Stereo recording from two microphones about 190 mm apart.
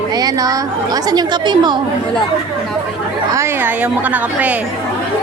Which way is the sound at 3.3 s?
10° right (ahead or behind).